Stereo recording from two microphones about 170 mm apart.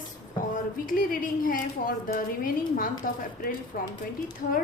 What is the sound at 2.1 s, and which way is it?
Speech, 55° left (ahead or behind).